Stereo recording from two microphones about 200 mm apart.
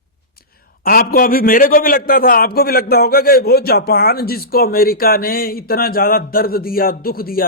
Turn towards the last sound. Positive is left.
turn(degrees=45)  # may be behind; listen again after turning